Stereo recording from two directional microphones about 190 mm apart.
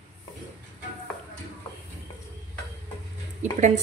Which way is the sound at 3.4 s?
40° right (ahead or behind).